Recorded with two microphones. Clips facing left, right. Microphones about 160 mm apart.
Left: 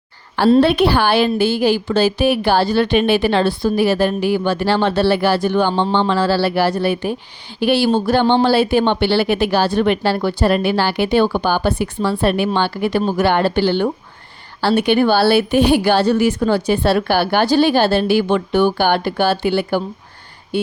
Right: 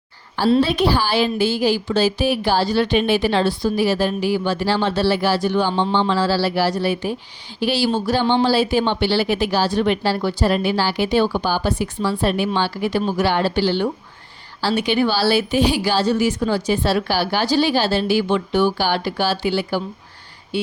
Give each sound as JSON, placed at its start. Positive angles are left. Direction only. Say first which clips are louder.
{"t": 0.6, "sound": "a woman's voice", "louder": "left 4 dB", "side_deg": 60}